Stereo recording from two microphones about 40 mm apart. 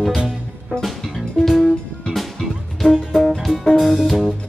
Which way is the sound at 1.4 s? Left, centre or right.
Centre.